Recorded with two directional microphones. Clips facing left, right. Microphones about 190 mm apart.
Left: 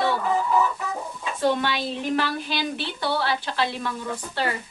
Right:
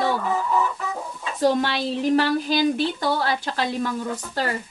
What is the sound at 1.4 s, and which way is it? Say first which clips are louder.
Speech: right 3 dB; 40° right (ahead or behind).